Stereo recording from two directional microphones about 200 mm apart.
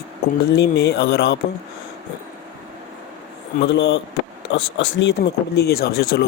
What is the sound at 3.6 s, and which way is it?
Speech, 60° left (ahead or behind).